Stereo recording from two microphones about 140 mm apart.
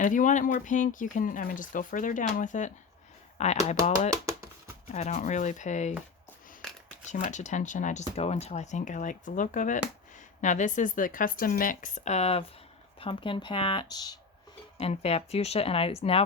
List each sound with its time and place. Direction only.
0.0 s speech: 65° left (ahead or behind)
4.1 s a sound: 25° right (ahead or behind)
4.9 s speech: 60° left (ahead or behind)
7.1 s speech: 60° left (ahead or behind)
13.0 s speech: 35° left (ahead or behind)
13.8 s speech: 30° left (ahead or behind)
14.8 s speech: 45° left (ahead or behind)